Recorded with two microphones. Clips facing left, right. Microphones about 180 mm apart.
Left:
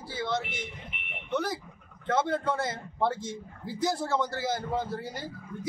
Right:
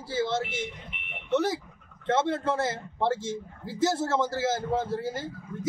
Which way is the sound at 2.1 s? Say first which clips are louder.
Right 2 dB; 25° right (ahead or behind).